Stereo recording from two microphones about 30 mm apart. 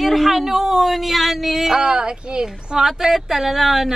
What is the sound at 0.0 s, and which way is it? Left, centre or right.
Speech, centre.